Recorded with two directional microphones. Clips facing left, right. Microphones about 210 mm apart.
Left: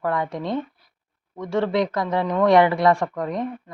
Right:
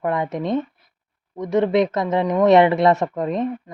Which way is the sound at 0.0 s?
20° right (ahead or behind).